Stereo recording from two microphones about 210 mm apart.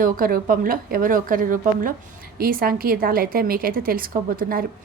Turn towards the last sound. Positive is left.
turn(degrees=-45)  # may be behind; listen again after turning